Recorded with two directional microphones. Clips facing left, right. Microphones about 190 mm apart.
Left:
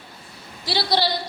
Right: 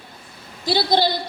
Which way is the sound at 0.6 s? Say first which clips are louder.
Right 4 dB; 50° right (ahead or behind).